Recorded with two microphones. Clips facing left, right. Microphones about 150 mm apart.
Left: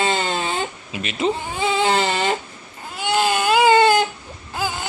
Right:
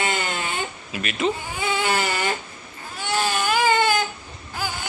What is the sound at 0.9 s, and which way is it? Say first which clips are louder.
Baby cry: left 2 dB; 25° left (ahead or behind).